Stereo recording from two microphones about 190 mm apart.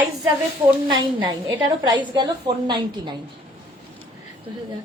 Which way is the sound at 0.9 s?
25° right (ahead or behind).